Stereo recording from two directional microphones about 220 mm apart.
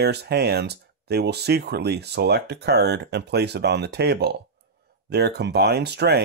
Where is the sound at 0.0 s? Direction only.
50° right (ahead or behind).